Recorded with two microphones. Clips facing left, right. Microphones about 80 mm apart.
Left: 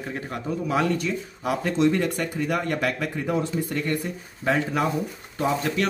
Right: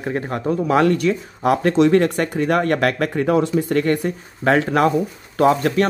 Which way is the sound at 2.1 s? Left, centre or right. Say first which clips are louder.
Right 7 dB; right.